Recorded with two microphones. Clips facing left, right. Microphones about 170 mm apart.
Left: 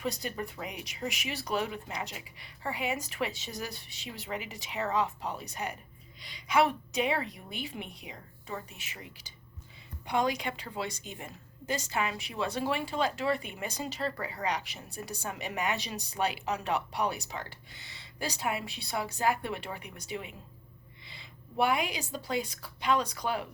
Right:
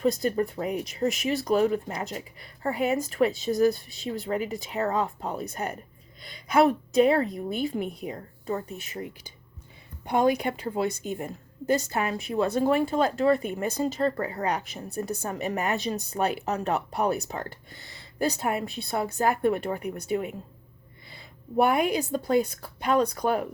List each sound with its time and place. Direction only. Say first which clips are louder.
0.0 s a woman's voice: right 10 dB; 40° right (ahead or behind)
8.4 s speech: right 10 dB; 40° right (ahead or behind)
10.1 s a woman's voice: right 7 dB; 50° right (ahead or behind)
21.6 s a woman's voice: right 7 dB; 50° right (ahead or behind)